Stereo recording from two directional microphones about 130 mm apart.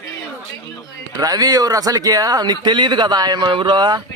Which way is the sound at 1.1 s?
30° right (ahead or behind).